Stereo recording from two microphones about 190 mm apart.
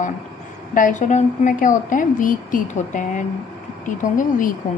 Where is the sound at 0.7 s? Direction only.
45° left (ahead or behind).